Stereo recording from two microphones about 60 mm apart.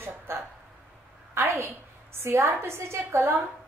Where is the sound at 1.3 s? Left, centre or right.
Right.